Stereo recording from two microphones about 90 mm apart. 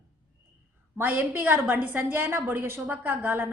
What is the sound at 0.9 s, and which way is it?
A woman's voice, 20° right (ahead or behind).